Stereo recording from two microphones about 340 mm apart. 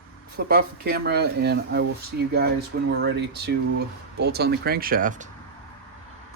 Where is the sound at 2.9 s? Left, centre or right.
Right.